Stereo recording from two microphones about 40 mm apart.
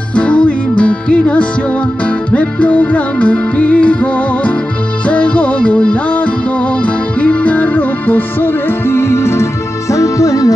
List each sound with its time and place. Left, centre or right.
0.1 s music: left
8.8 s music: left